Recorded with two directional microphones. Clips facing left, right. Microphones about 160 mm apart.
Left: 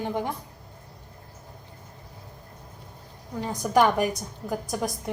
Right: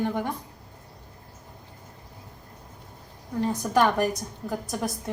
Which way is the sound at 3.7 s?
15° left (ahead or behind).